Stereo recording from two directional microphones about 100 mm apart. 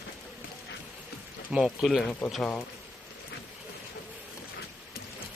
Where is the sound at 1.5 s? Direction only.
5° right (ahead or behind).